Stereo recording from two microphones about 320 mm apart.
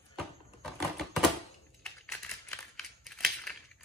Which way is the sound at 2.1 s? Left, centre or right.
Centre.